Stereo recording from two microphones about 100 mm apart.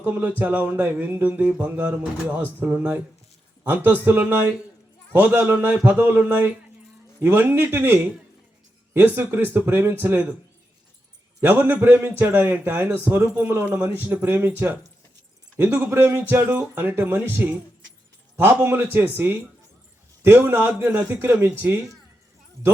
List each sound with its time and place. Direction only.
0.0 s a man's voice: 20° right (ahead or behind)
11.3 s a man's voice: 20° right (ahead or behind)
18.6 s a man's voice: 20° right (ahead or behind)